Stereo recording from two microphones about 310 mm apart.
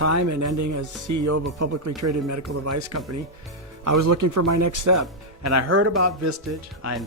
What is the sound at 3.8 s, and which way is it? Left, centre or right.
Speech, right.